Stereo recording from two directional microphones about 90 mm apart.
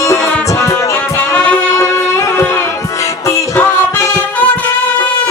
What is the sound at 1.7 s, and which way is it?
Music, 35° left (ahead or behind).